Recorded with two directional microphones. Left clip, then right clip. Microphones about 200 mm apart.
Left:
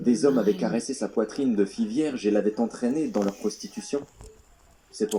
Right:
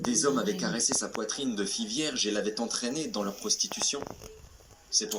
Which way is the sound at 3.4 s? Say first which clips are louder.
Right 2 dB; 25° left (ahead or behind).